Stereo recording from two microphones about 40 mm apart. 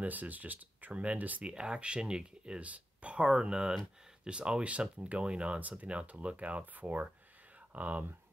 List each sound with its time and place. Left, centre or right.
0.0 s speech: right
1.4 s speech: right
2.6 s speech: right
5.6 s speech: right